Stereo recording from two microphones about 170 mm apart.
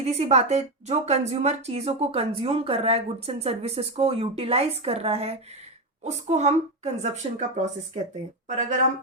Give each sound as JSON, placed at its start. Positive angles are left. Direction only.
{"t": 0.0, "sound": "a woman's voice", "side_deg": -40}